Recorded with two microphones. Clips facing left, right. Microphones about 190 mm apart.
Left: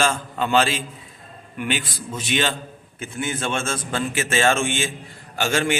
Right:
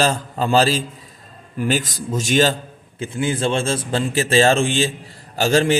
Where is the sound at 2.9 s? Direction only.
30° right (ahead or behind).